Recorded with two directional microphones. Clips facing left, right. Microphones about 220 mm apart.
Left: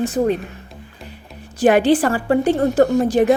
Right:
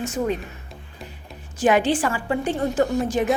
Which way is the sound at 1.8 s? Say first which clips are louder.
Left 7 dB; 35° left (ahead or behind).